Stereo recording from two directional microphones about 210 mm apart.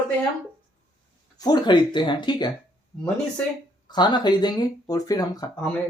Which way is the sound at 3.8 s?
20° left (ahead or behind).